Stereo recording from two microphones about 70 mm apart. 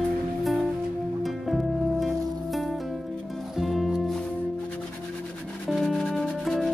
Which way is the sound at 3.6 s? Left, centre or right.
Centre.